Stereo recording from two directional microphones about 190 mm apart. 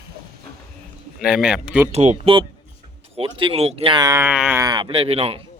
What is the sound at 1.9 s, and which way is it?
Speech, 35° right (ahead or behind).